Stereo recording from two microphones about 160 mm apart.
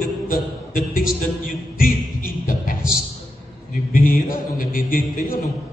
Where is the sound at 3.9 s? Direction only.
65° left (ahead or behind).